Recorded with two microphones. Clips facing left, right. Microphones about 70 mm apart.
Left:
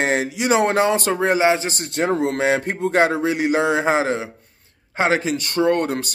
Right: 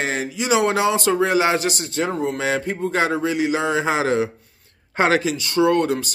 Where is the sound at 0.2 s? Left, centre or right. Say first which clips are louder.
Left 1 dB; left.